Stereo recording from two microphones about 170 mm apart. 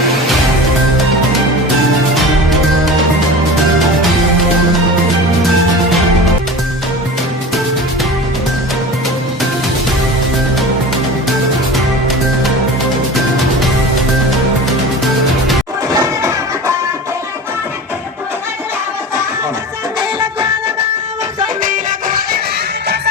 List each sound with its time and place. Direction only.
15.9 s music: 20° right (ahead or behind)
20.0 s music: 25° right (ahead or behind)
21.6 s music: 50° right (ahead or behind)